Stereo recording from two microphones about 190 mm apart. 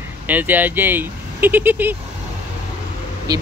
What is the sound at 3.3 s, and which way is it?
Speech, 20° right (ahead or behind).